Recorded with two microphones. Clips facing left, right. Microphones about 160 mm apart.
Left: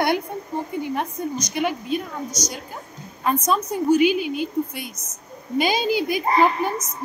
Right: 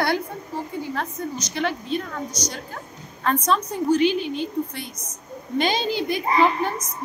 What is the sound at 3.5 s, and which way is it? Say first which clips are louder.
Speech: left 2 dB; 10° left (ahead or behind).